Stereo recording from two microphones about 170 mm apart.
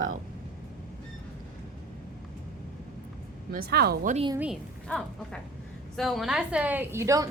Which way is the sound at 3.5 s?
65° right (ahead or behind).